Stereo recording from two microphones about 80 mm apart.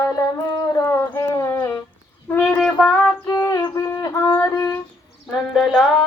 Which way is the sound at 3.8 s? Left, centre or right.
Left.